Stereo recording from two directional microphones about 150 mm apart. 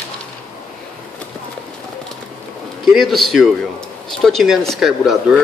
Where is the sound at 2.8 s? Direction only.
Centre (ahead or behind).